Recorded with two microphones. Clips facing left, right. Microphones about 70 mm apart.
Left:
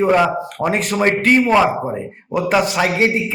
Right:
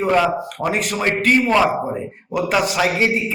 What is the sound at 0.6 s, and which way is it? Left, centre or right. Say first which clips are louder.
Speech: left 4 dB; left.